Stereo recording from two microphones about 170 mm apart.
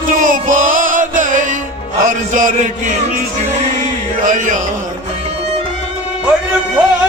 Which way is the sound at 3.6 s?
50° right (ahead or behind).